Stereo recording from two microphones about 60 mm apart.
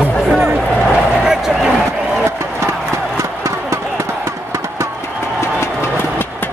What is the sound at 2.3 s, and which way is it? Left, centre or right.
Run, right.